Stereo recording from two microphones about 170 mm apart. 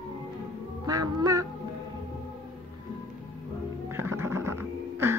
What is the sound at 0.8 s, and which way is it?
Music, 20° right (ahead or behind).